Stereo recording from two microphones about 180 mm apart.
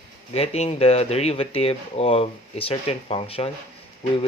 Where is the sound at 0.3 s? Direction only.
35° left (ahead or behind).